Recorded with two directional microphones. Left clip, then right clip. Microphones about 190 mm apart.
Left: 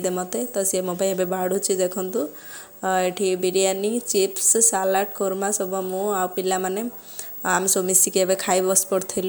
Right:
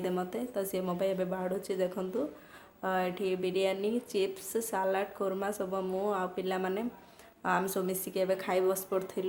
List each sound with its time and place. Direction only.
0.0 s a woman's voice: 30° left (ahead or behind)
6.1 s a woman's voice: 30° left (ahead or behind)